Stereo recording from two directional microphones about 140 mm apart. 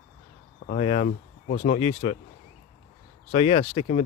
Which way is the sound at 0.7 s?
50° left (ahead or behind).